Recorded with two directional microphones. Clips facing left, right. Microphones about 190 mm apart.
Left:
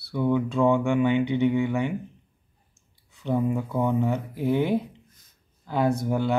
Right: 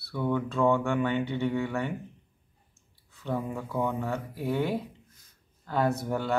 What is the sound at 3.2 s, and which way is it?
Speech, 15° left (ahead or behind).